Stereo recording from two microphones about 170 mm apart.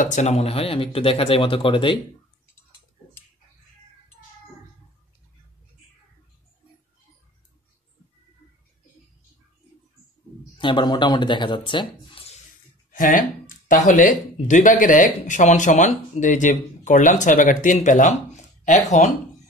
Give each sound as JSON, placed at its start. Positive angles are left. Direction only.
{"t": 0.0, "sound": "speech", "side_deg": 45}
{"t": 10.6, "sound": "speech", "side_deg": 25}
{"t": 12.9, "sound": "a sound", "side_deg": 50}
{"t": 13.8, "sound": "speech", "side_deg": 50}